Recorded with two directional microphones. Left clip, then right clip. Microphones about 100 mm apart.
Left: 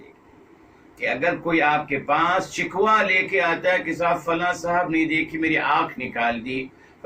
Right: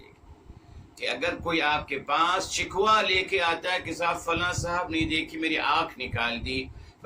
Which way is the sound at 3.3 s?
30° right (ahead or behind).